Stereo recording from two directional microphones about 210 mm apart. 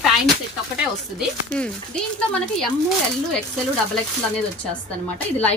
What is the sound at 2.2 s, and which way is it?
Speech, 5° left (ahead or behind).